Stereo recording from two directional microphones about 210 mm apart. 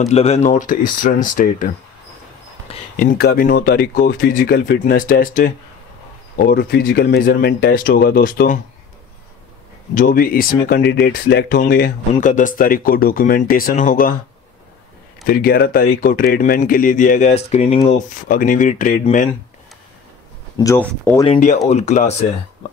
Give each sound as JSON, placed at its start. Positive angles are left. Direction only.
{"t": 0.0, "sound": "speech", "side_deg": 30}
{"t": 3.0, "sound": "speech", "side_deg": 45}
{"t": 9.9, "sound": "speech", "side_deg": 40}
{"t": 15.2, "sound": "speech", "side_deg": 45}
{"t": 20.5, "sound": "speech", "side_deg": 15}
{"t": 21.2, "sound": "speech", "side_deg": 30}